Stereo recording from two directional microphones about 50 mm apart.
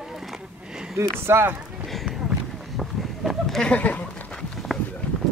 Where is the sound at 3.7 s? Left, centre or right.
Left.